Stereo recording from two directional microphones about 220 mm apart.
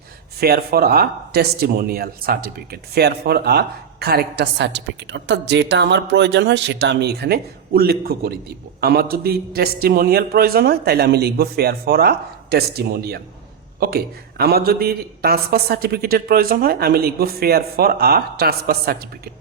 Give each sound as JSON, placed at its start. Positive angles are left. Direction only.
{"t": 0.3, "sound": "a man's voice", "side_deg": -45}